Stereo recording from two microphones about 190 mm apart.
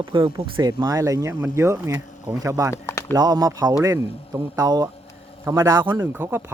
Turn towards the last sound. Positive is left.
turn(degrees=-10)  # may be behind; listen again after turning